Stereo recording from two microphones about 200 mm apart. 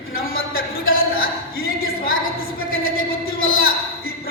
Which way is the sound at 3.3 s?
90° left.